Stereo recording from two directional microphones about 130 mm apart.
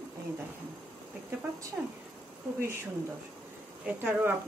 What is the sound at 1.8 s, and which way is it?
Speech, 5° right (ahead or behind).